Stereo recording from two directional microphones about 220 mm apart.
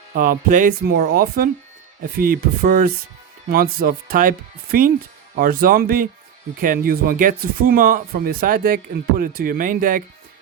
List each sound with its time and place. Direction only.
0.1 s speech: 40° right (ahead or behind)